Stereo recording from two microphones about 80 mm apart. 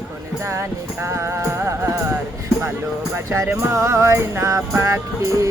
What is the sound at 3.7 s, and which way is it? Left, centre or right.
Speech, right.